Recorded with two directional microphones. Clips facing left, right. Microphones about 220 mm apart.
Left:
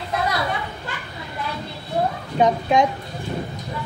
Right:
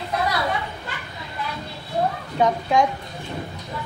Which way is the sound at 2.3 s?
20° left (ahead or behind).